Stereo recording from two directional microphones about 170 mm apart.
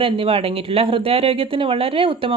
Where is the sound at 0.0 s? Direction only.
35° right (ahead or behind).